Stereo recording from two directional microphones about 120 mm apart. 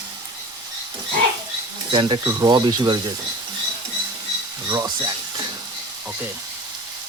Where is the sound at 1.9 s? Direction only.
40° right (ahead or behind).